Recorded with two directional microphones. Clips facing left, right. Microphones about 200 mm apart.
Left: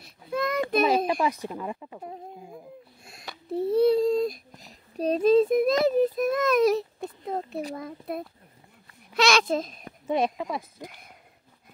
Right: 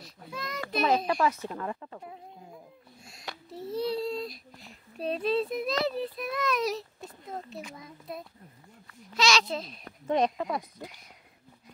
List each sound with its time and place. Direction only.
0.0 s child singing: 55° left (ahead or behind)
0.8 s speech: 15° left (ahead or behind)
3.5 s speech: 55° left (ahead or behind)
7.3 s a child's voice: 60° left (ahead or behind)
9.8 s speech: 10° left (ahead or behind)